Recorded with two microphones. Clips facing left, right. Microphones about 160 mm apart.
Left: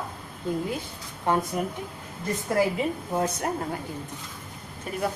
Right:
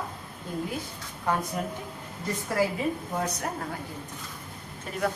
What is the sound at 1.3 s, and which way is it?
Speech, 25° left (ahead or behind).